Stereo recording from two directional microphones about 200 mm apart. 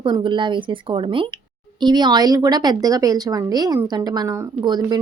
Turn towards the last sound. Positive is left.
turn(degrees=-20)  # may be behind; listen again after turning